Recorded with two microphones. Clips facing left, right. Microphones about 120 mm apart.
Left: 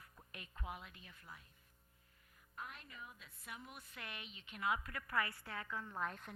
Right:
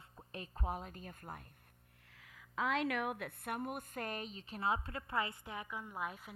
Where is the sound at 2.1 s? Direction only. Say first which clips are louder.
Right 12 dB; 90° right; by 6.4 s 5° right (ahead or behind).